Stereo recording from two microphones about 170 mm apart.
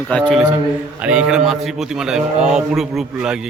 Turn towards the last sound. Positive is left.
turn(degrees=-5)  # may be behind; listen again after turning